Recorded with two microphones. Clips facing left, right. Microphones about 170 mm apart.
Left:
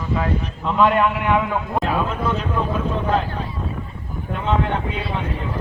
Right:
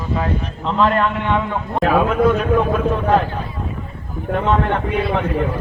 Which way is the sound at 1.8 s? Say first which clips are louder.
Right 12 dB; 60° right (ahead or behind).